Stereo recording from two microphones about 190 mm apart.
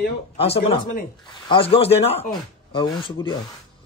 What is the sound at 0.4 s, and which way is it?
A man's voice, 30° left (ahead or behind).